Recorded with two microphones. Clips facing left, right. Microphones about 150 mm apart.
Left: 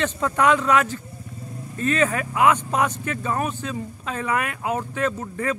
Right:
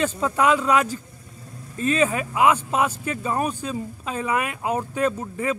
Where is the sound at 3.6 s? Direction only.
25° right (ahead or behind).